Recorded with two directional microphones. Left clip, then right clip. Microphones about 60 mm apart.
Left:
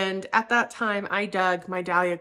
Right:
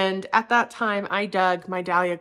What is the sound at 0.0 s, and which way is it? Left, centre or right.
A woman's voice, right.